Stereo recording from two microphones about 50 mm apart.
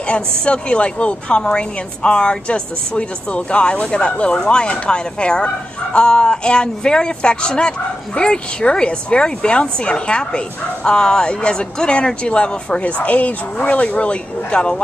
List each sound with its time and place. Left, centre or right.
0.1 s speech: left